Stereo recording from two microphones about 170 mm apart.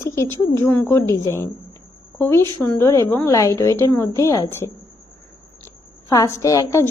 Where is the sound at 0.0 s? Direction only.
15° left (ahead or behind).